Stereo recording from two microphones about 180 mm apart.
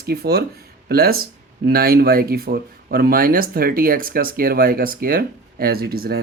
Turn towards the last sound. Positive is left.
turn(degrees=-60)  # may be behind; listen again after turning